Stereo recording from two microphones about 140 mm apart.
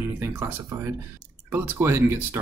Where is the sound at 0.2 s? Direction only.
15° right (ahead or behind).